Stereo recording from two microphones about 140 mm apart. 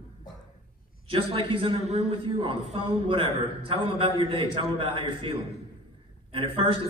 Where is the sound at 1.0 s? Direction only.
40° right (ahead or behind).